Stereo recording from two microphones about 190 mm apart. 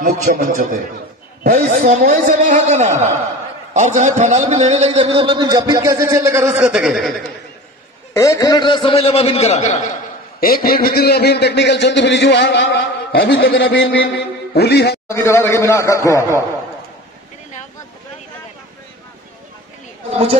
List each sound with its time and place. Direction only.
0.0 s a man's voice: 40° right (ahead or behind); by 7.1 s 5° right (ahead or behind)
8.1 s a man's voice: 15° left (ahead or behind); by 9.8 s 35° left (ahead or behind)
10.4 s a man's voice: 50° left (ahead or behind); by 12.8 s 75° left (ahead or behind)
13.1 s a man's voice: 55° left (ahead or behind); by 13.9 s 70° left (ahead or behind)
14.1 s a man's voice: 60° left (ahead or behind)
15.0 s a man's voice: 15° left (ahead or behind)